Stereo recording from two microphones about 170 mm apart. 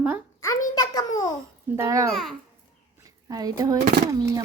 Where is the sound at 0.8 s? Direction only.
25° left (ahead or behind).